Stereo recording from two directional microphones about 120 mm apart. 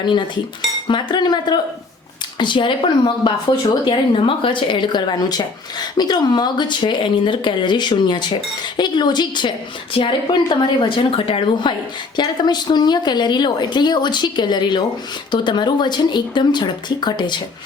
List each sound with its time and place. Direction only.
0.0 s a woman's voice: 40° left (ahead or behind)